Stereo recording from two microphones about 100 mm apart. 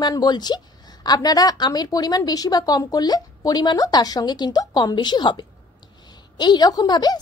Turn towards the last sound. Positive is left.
turn(degrees=45)  # may be behind; listen again after turning